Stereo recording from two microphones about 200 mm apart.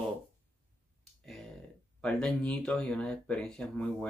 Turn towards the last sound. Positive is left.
turn(degrees=5)  # may be behind; listen again after turning